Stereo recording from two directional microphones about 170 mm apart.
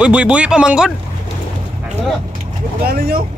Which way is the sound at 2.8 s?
60° right (ahead or behind).